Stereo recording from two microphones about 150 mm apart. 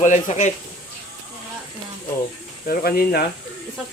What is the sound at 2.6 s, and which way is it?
Speech, 85° left.